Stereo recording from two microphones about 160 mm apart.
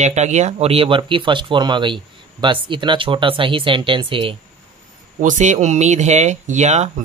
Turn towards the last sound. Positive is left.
turn(degrees=-45)  # may be behind; listen again after turning